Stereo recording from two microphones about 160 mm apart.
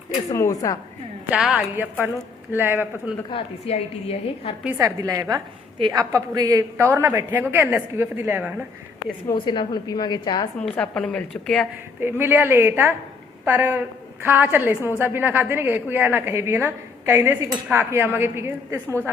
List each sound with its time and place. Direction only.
0.1 s a woman's voice: 20° left (ahead or behind)
1.3 s a woman's voice: 5° right (ahead or behind)
3.2 s a woman's voice: 35° left (ahead or behind)
4.8 s a woman's voice: 20° right (ahead or behind)
9.2 s a woman's voice: 25° left (ahead or behind)
10.6 s a woman's voice: 5° left (ahead or behind)
11.9 s a woman's voice: 15° right (ahead or behind)